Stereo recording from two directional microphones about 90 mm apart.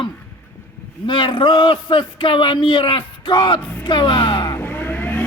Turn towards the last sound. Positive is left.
turn(degrees=20)  # may be behind; listen again after turning